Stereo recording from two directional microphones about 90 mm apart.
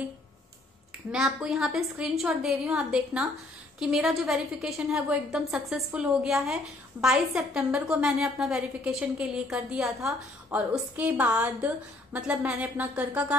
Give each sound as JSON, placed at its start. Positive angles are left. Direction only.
{"t": 1.1, "sound": "a woman's voice", "side_deg": -5}